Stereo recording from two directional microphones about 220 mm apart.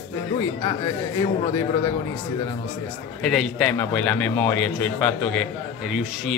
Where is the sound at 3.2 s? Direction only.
Centre (ahead or behind).